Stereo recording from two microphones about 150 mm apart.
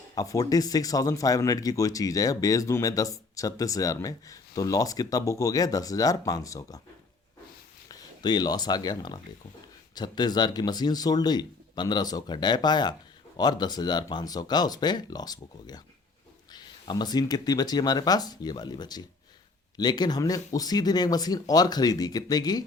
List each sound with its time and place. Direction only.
0.1 s speech: 25° left (ahead or behind)
7.9 s speech: 30° left (ahead or behind)